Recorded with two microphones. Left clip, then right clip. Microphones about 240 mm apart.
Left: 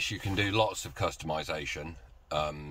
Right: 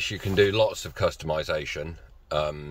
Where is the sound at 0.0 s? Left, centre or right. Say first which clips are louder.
Right 9 dB; centre.